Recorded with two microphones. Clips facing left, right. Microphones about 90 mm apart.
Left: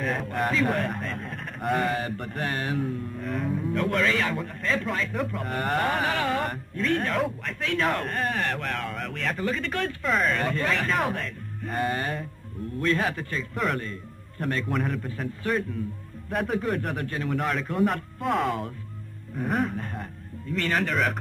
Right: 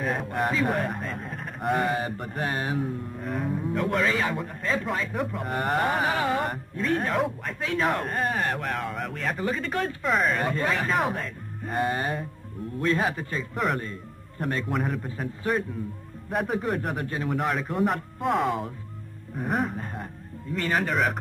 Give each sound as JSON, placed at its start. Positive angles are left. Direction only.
{"t": 0.0, "sound": "speech", "side_deg": -5}
{"t": 3.2, "sound": "speech", "side_deg": -5}
{"t": 19.3, "sound": "music", "side_deg": -5}
{"t": 20.5, "sound": "speech", "side_deg": -15}